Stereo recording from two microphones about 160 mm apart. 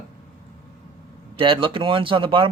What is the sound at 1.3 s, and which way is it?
Speech, 35° right (ahead or behind).